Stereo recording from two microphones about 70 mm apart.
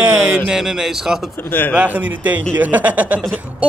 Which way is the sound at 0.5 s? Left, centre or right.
Centre.